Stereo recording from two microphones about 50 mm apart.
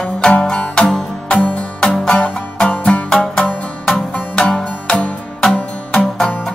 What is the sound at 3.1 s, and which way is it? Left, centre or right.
Music, centre.